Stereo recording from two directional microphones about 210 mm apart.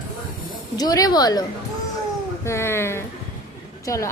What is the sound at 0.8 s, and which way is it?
A woman's voice, 15° left (ahead or behind).